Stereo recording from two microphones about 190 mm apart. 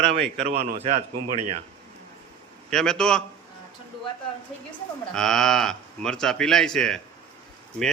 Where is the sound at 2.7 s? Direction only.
5° left (ahead or behind).